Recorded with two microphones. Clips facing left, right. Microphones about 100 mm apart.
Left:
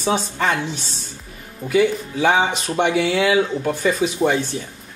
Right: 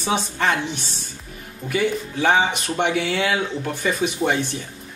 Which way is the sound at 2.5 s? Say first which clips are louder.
Left 1 dB; 5° right (ahead or behind).